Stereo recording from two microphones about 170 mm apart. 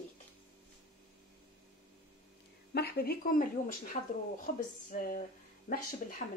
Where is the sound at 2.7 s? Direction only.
70° left (ahead or behind).